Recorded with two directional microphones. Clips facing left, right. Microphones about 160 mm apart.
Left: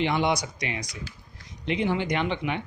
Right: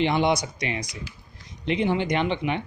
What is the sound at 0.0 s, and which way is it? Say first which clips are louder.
Speech: right 3 dB; 25° right (ahead or behind).